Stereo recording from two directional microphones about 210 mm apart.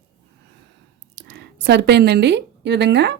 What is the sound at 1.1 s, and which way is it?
Speech, 55° right (ahead or behind).